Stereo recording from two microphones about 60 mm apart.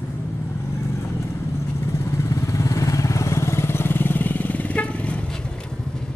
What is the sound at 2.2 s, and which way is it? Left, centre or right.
Vehicle, left.